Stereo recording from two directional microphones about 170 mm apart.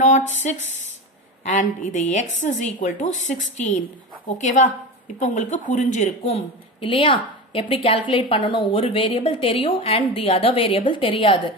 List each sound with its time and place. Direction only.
0.0 s a woman's voice: 45° left (ahead or behind)